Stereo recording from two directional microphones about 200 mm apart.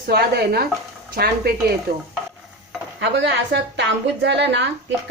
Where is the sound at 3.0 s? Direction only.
60° right (ahead or behind).